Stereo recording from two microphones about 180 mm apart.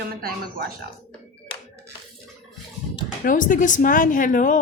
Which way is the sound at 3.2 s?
45° left (ahead or behind).